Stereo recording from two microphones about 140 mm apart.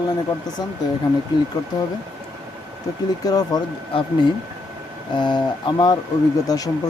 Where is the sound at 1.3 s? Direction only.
30° left (ahead or behind).